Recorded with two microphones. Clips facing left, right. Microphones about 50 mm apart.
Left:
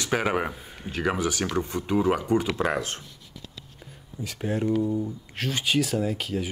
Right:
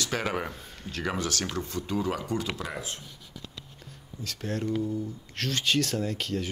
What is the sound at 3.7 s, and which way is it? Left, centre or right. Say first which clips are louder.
Speech: left 4 dB; centre.